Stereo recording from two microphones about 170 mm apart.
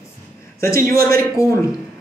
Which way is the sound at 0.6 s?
20° left (ahead or behind).